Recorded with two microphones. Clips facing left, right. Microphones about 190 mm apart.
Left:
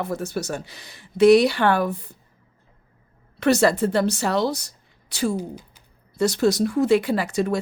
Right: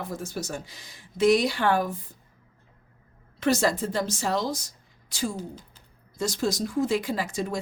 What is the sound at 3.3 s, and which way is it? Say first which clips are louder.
Speech: left 5 dB; 70° left (ahead or behind).